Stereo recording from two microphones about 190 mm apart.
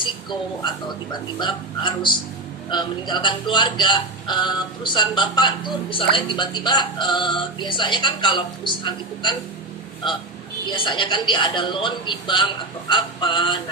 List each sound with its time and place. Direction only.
0.0 s speech: 25° left (ahead or behind)
10.7 s speech: 25° left (ahead or behind)